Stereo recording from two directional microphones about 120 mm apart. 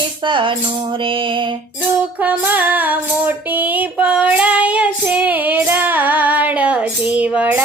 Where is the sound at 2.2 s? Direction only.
15° right (ahead or behind).